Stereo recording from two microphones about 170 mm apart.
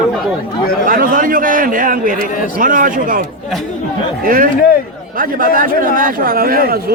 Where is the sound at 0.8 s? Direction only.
55° right (ahead or behind).